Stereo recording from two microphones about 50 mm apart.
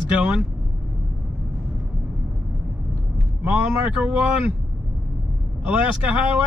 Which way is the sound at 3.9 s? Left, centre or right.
Right.